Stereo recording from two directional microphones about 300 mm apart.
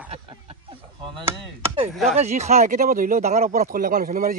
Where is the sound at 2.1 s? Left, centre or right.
Right.